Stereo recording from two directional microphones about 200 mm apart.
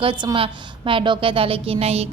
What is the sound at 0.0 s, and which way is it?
A woman's voice, 25° right (ahead or behind).